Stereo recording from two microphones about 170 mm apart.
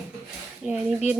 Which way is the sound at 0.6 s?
Centre (ahead or behind).